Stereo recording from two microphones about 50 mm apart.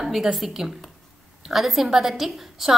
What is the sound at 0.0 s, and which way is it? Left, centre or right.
A woman's voice, centre.